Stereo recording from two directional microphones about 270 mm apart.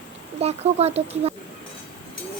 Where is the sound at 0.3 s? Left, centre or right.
Right.